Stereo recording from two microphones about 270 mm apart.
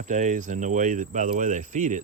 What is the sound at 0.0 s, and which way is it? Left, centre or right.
Speech, right.